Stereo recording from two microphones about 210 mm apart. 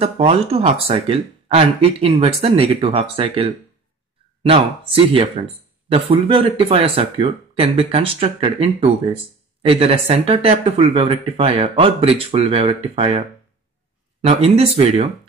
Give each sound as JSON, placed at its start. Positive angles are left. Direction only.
{"t": 0.0, "sound": "speech", "side_deg": -30}
{"t": 14.2, "sound": "speech", "side_deg": -30}